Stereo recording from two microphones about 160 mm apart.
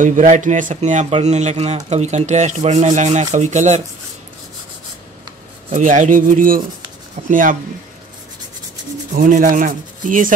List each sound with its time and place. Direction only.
0.0 s speech: 55° right (ahead or behind)
5.7 s rub: 55° right (ahead or behind)
9.1 s rub: 55° right (ahead or behind)